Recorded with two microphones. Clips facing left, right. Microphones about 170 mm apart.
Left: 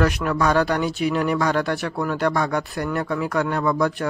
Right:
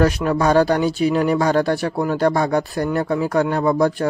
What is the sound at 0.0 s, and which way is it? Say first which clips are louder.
Speech: right 3 dB; 30° right (ahead or behind).